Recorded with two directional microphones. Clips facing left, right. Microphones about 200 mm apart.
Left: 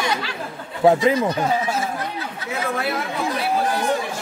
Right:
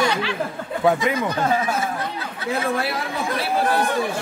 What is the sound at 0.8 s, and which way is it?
Speech, 30° left (ahead or behind).